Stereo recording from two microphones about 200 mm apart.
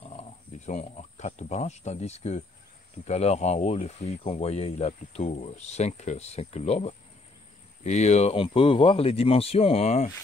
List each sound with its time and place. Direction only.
0.0 s speech: 30° left (ahead or behind)